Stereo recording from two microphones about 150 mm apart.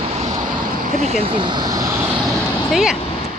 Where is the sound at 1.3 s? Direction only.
30° right (ahead or behind).